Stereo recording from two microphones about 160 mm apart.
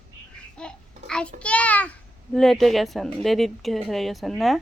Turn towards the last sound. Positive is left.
turn(degrees=0)  # may be behind; listen again after turning